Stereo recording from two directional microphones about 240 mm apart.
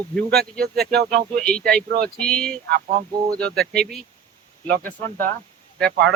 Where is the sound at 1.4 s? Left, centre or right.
Centre.